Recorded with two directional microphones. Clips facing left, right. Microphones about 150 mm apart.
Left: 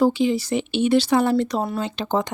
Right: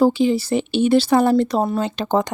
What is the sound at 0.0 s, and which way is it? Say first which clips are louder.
Speech: right 3 dB; 35° right (ahead or behind).